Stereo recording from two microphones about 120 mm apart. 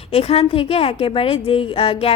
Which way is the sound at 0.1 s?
55° left (ahead or behind).